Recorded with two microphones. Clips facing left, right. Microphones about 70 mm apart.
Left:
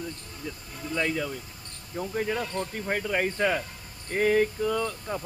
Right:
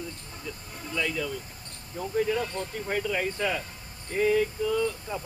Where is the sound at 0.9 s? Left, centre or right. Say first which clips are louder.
Left 1 dB; left.